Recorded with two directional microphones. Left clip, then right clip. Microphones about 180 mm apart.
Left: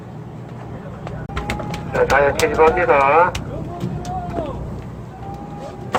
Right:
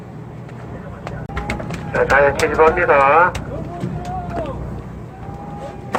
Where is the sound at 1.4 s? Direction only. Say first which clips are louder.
Left 1 dB; 40° left (ahead or behind).